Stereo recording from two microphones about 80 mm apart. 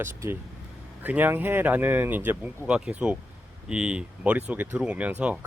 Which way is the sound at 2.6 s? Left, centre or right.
Centre.